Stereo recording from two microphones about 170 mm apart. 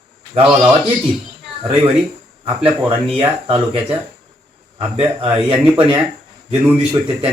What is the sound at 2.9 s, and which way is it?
Speech, 35° right (ahead or behind).